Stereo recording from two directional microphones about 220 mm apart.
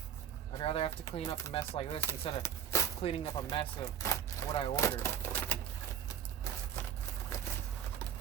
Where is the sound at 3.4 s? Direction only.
20° left (ahead or behind).